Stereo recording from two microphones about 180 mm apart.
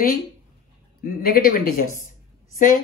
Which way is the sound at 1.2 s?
55° left (ahead or behind).